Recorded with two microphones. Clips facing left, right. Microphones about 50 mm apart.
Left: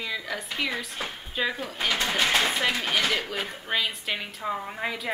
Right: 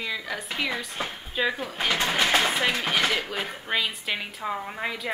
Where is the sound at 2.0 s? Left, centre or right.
Right.